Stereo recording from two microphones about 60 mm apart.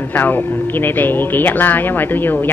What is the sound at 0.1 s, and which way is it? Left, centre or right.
A woman's voice, left.